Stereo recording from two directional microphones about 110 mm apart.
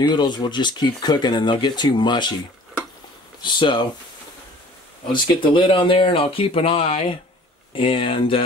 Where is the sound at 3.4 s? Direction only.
45° left (ahead or behind).